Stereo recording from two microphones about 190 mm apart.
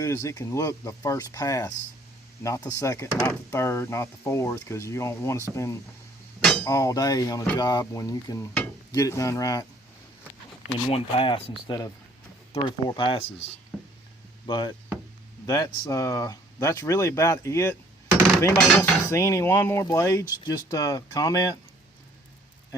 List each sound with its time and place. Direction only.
0.0 s cutlery: 15° left (ahead or behind)
6.7 s speech: 15° left (ahead or behind)
8.9 s cutlery: 15° left (ahead or behind)
10.8 s speech: 30° left (ahead or behind)
14.4 s speech: 25° left (ahead or behind)
15.4 s cutlery: 20° left (ahead or behind)